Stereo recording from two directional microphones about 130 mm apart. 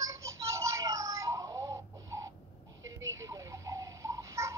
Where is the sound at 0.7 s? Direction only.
25° right (ahead or behind).